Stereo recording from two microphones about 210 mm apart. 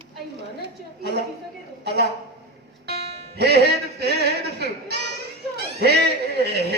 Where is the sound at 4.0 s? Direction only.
50° right (ahead or behind).